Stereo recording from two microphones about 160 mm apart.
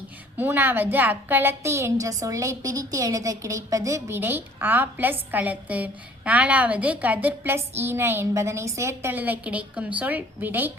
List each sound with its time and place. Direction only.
0.3 s a woman's voice: 10° right (ahead or behind)